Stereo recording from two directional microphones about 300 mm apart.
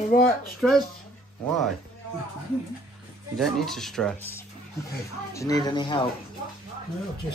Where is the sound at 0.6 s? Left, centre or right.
Centre.